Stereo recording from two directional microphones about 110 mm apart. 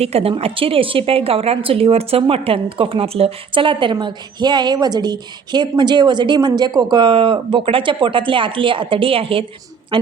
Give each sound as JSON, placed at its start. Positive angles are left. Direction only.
{"t": 0.0, "sound": "a woman's voice", "side_deg": -65}